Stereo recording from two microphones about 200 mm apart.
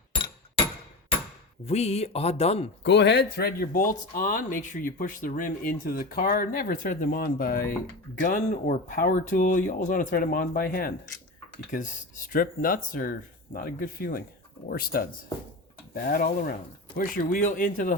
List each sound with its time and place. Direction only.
1.6 s speech: 30° left (ahead or behind)
2.8 s speech: 60° left (ahead or behind); by 17.9 s 40° left (ahead or behind)